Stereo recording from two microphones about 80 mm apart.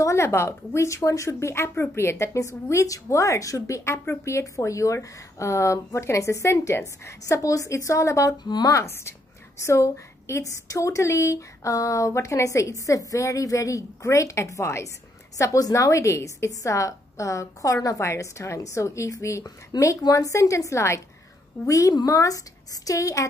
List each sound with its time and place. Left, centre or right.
0.0 s speech: left
8.5 s speech: left
8.7 s a woman's voice: left